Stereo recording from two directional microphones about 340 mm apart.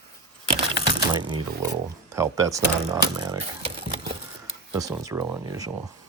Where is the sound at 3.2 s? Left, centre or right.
Centre.